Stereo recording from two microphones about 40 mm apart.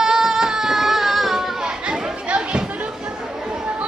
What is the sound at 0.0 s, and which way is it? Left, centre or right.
Music, centre.